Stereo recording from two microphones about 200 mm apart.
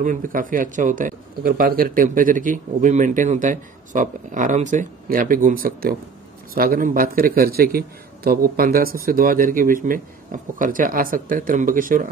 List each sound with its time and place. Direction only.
0.0 s a man's voice: 40° right (ahead or behind)